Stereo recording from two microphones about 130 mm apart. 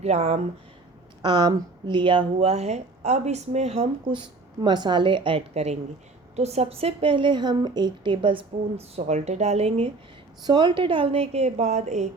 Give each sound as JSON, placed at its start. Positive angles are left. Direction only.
{"t": 0.0, "sound": "speech", "side_deg": -55}
{"t": 1.2, "sound": "speech", "side_deg": -35}
{"t": 9.0, "sound": "speech", "side_deg": -60}
{"t": 10.4, "sound": "a woman's voice", "side_deg": -35}